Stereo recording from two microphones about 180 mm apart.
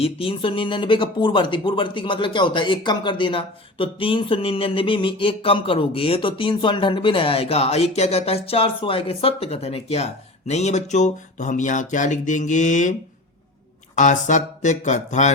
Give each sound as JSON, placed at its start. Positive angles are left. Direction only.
{"t": 0.0, "sound": "speech", "side_deg": 30}
{"t": 13.9, "sound": "speech", "side_deg": 45}